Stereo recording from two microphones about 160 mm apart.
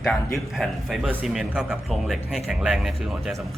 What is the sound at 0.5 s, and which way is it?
Speech, centre (ahead or behind).